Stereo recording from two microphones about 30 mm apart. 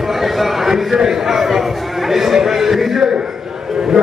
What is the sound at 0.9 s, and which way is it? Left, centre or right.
A man's voice, centre.